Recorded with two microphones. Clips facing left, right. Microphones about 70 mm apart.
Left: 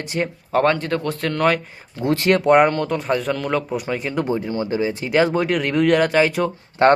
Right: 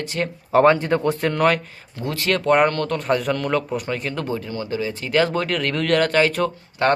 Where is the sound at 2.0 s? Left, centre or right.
Left.